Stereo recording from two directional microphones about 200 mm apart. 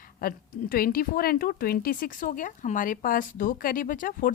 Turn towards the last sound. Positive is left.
turn(degrees=45)  # may be behind; listen again after turning